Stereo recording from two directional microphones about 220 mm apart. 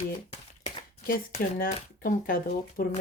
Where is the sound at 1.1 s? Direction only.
35° left (ahead or behind).